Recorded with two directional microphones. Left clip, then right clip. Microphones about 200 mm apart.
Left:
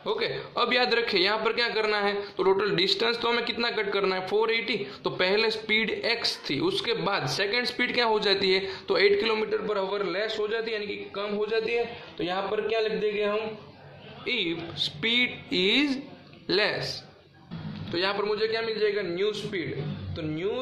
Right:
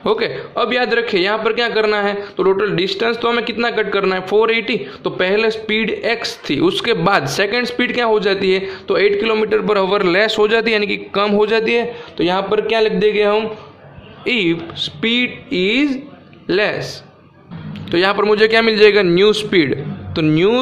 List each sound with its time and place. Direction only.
0.0 s a man's voice: 30° right (ahead or behind)
0.6 s a man's voice: 15° right (ahead or behind)
9.5 s a man's voice: 40° right (ahead or behind)
14.2 s speech: 30° right (ahead or behind)
15.5 s a man's voice: 10° right (ahead or behind)
17.9 s a man's voice: 35° right (ahead or behind); by 20.6 s 50° right (ahead or behind)